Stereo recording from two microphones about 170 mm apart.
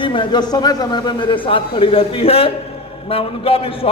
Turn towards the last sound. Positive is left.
turn(degrees=35)  # may be behind; listen again after turning